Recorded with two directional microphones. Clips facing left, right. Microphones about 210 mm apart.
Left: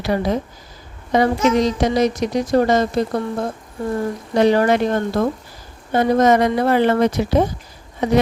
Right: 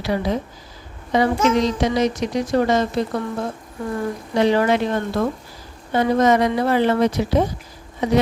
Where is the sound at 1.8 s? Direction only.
40° left (ahead or behind).